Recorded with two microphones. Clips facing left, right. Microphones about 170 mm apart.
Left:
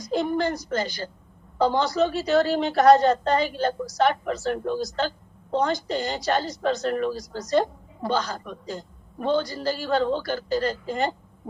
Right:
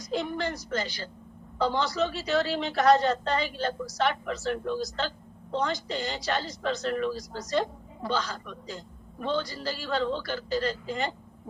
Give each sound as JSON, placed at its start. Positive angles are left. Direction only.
{"t": 0.1, "sound": "a woman's voice", "side_deg": 45}